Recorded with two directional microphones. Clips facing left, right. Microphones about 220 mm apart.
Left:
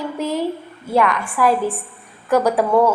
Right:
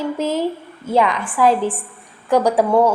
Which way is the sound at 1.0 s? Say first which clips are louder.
Right 1 dB; 20° right (ahead or behind).